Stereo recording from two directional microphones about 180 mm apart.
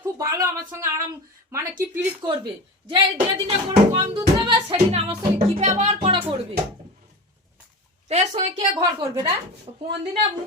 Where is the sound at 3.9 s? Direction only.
30° right (ahead or behind).